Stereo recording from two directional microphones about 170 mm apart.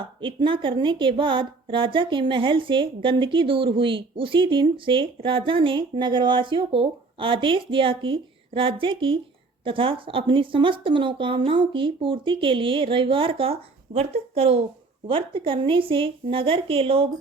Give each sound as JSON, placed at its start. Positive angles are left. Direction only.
{"t": 0.2, "sound": "a woman's voice", "side_deg": -30}